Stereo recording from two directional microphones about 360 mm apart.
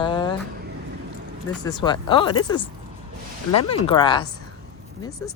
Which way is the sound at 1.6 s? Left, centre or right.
Centre.